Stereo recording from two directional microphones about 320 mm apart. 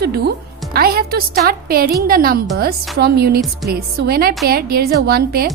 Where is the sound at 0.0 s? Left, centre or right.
Right.